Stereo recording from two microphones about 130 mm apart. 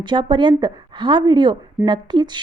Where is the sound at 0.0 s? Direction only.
40° right (ahead or behind).